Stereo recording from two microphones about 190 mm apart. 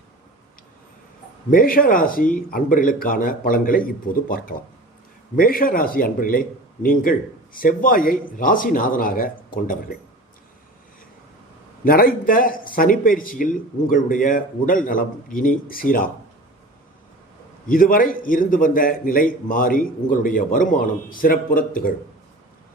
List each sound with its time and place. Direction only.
1.5 s a man's voice: 50° left (ahead or behind)
11.9 s a man's voice: 50° left (ahead or behind)
17.7 s a man's voice: 50° left (ahead or behind)